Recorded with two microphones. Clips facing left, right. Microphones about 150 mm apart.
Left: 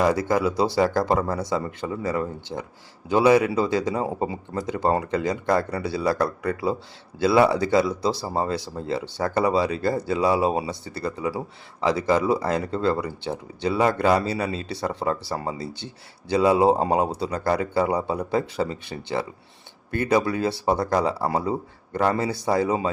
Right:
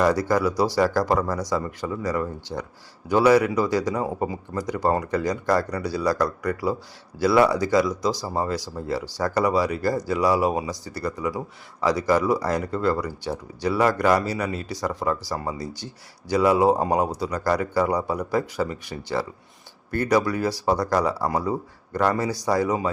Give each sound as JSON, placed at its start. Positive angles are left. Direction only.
{"t": 0.0, "sound": "speech", "side_deg": 20}